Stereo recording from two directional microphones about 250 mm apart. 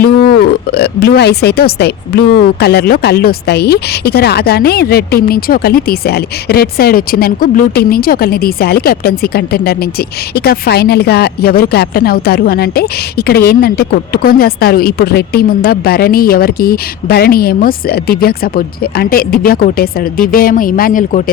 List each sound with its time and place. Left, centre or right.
0.7 s a woman's voice: left